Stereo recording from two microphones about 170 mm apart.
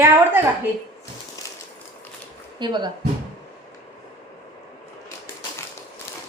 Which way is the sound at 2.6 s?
25° right (ahead or behind).